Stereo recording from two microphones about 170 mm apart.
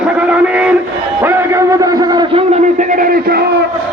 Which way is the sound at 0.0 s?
5° right (ahead or behind).